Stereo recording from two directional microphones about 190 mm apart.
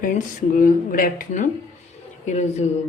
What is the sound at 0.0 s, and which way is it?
A woman's voice, 45° left (ahead or behind).